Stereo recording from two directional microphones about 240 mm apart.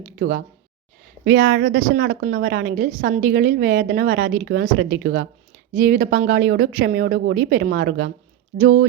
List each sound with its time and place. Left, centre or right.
0.0 s a woman's voice: right